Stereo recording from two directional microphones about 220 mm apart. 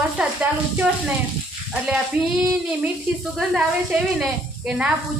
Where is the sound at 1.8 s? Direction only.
5° right (ahead or behind).